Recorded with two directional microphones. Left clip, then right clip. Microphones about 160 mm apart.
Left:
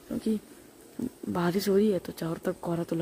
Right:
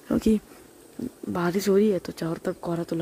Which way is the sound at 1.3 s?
10° right (ahead or behind).